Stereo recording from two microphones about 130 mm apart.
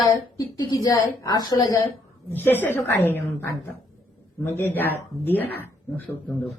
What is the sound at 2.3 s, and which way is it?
Speech, 15° left (ahead or behind).